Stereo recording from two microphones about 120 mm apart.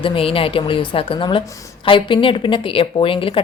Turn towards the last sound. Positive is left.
turn(degrees=45)  # may be behind; listen again after turning